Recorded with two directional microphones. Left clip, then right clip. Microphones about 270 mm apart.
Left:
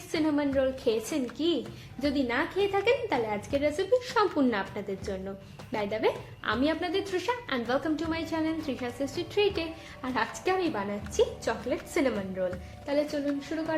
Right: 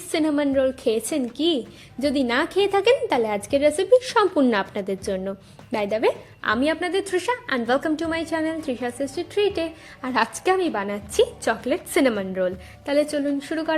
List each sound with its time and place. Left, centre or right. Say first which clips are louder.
0.1 s a woman's voice: right 6 dB; right